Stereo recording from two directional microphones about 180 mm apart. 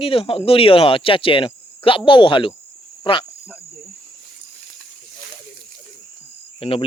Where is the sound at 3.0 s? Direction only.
25° left (ahead or behind).